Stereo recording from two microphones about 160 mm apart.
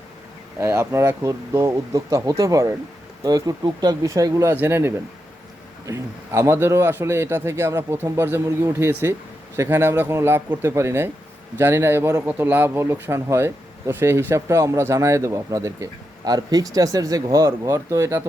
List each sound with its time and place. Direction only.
0.6 s speech: 15° right (ahead or behind)